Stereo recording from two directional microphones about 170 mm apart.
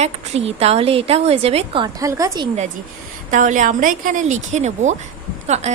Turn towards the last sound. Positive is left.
turn(degrees=-40)  # may be behind; listen again after turning